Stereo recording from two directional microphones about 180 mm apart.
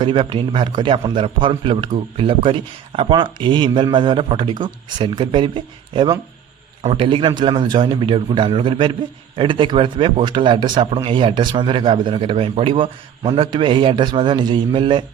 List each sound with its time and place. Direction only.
0.0 s a man's voice: 25° right (ahead or behind)